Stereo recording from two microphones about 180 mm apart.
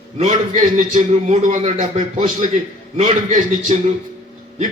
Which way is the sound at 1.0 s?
40° right (ahead or behind).